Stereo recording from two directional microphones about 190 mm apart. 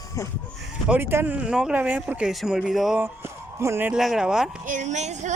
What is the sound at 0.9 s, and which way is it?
Speech, 10° right (ahead or behind).